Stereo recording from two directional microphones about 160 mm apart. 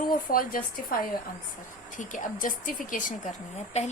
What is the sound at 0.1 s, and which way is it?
A woman's voice, 65° left (ahead or behind).